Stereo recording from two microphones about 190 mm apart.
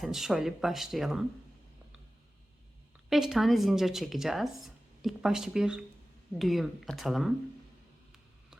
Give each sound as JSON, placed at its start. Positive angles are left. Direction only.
{"t": 0.0, "sound": "speech", "side_deg": 0}
{"t": 3.1, "sound": "speech", "side_deg": 0}